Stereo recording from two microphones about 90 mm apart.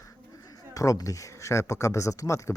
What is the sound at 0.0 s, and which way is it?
Speech, 40° left (ahead or behind).